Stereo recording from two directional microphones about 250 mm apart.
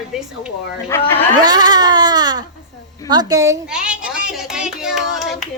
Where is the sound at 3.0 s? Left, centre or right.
Centre.